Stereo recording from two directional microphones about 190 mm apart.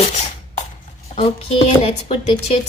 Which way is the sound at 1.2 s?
30° left (ahead or behind).